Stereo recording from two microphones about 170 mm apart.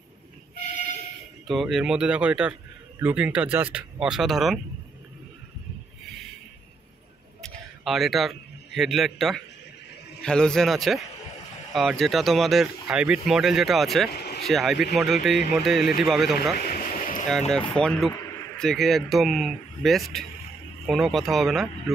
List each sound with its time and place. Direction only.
1.5 s speech: centre (ahead or behind)
7.4 s a man's voice: centre (ahead or behind)
14.1 s vehicle: 70° left (ahead or behind)
14.4 s speech: centre (ahead or behind)
16.5 s a sound: 55° left (ahead or behind)
17.3 s speech: 5° left (ahead or behind)